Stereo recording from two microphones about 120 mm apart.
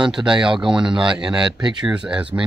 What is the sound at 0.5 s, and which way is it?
Speech, 45° right (ahead or behind).